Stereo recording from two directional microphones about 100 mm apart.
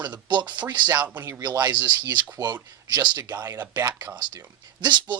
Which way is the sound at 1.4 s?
40° right (ahead or behind).